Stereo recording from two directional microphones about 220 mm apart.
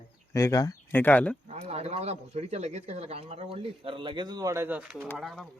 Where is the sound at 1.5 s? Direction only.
30° right (ahead or behind); by 5.4 s centre (ahead or behind).